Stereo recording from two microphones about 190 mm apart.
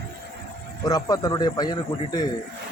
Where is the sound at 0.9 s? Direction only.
20° left (ahead or behind).